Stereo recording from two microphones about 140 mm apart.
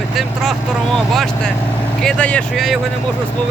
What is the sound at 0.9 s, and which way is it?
Speech, centre (ahead or behind).